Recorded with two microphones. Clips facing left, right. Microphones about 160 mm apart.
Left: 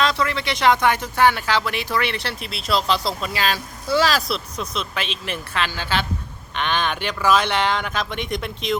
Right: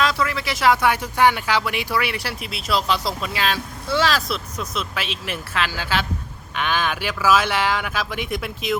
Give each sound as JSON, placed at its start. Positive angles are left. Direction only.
{"t": 0.0, "sound": "speech", "side_deg": -5}